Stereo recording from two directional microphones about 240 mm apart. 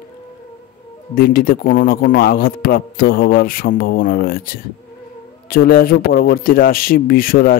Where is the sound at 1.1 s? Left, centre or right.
Left.